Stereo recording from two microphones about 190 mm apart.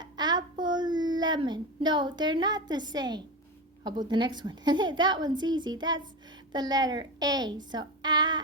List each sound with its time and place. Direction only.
0.0 s child singing: 20° right (ahead or behind)
0.6 s a woman's voice: 25° right (ahead or behind)